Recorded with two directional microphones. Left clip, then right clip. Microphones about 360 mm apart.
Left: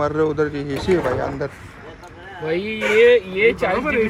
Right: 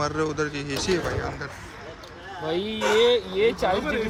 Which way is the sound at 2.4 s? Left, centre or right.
Centre.